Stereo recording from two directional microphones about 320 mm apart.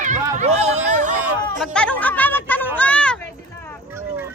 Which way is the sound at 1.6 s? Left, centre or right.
Centre.